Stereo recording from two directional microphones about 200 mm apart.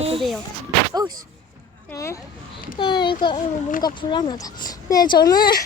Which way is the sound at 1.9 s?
15° left (ahead or behind).